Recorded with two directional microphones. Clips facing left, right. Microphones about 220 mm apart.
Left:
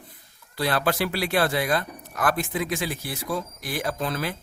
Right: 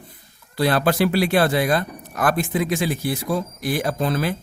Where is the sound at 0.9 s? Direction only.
25° right (ahead or behind).